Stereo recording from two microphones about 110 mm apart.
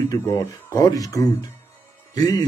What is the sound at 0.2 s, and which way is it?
Speech, 25° left (ahead or behind).